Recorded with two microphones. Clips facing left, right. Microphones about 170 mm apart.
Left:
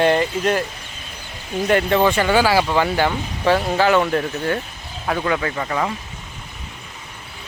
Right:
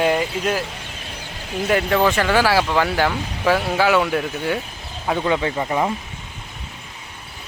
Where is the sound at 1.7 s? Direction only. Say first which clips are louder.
Left 1 dB; centre (ahead or behind).